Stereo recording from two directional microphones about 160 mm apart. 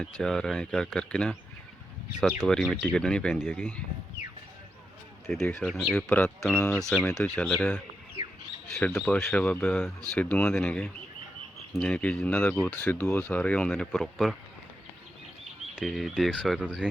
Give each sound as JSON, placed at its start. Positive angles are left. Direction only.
{"t": 0.0, "sound": "speech", "side_deg": 5}
{"t": 5.2, "sound": "speech", "side_deg": 0}
{"t": 15.7, "sound": "speech", "side_deg": 0}